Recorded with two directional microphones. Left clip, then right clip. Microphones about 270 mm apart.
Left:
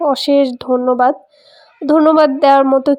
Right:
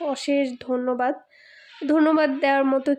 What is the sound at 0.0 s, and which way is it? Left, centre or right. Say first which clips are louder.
A woman's voice: left 11 dB; left.